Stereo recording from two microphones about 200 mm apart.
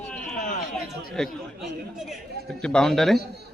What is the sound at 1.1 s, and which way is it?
Speech, centre (ahead or behind).